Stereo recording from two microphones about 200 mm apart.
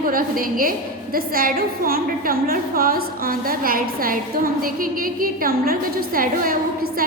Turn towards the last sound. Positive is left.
turn(degrees=-45)  # may be behind; listen again after turning